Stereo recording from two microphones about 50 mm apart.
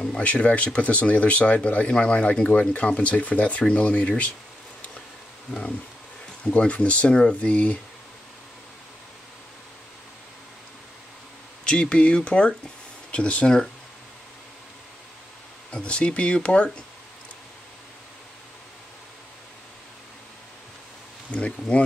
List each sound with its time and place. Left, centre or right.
0.2 s speech: left
6.4 s speech: left
11.6 s speech: left
15.7 s speech: left
21.3 s speech: left